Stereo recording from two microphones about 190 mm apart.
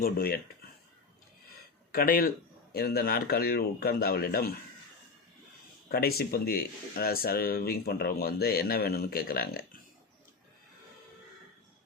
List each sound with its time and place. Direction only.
0.0 s speech: 55° left (ahead or behind)
1.9 s speech: 50° left (ahead or behind)
5.9 s speech: 55° left (ahead or behind)